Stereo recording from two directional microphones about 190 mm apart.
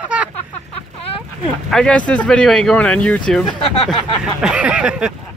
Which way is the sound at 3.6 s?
30° left (ahead or behind).